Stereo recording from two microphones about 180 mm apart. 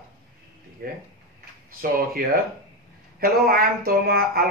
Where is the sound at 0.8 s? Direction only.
55° right (ahead or behind).